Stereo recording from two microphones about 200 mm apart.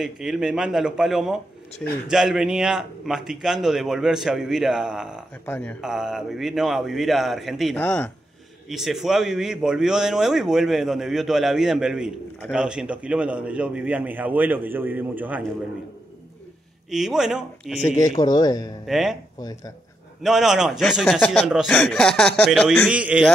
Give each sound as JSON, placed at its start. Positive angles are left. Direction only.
{"t": 0.0, "sound": "speech", "side_deg": -5}
{"t": 5.4, "sound": "speech", "side_deg": 10}
{"t": 7.7, "sound": "speech", "side_deg": 10}
{"t": 8.6, "sound": "a man's voice", "side_deg": 0}
{"t": 16.9, "sound": "speech", "side_deg": 0}
{"t": 17.8, "sound": "speech", "side_deg": 15}
{"t": 18.9, "sound": "speech", "side_deg": 0}
{"t": 20.2, "sound": "speech", "side_deg": 0}